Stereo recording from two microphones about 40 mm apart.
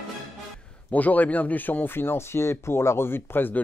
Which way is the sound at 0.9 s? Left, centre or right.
Left.